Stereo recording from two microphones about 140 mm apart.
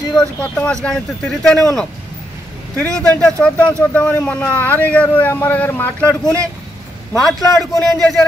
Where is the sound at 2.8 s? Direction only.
5° left (ahead or behind).